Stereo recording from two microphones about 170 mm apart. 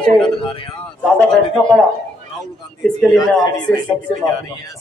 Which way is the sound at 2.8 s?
Centre (ahead or behind).